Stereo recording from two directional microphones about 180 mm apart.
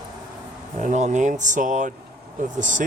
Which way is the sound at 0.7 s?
45° right (ahead or behind).